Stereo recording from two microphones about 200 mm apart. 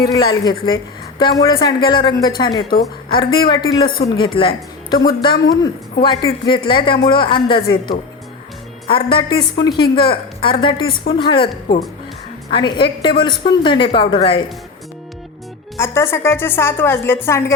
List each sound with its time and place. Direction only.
0.4 s a woman's voice: 20° left (ahead or behind)
12.5 s a woman's voice: 25° left (ahead or behind)
15.8 s a woman's voice: 15° left (ahead or behind)